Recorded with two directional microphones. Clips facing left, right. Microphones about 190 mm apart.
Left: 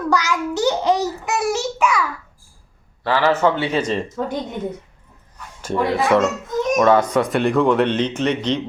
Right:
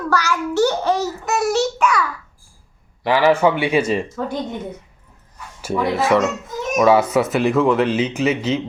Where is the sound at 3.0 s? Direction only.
15° right (ahead or behind).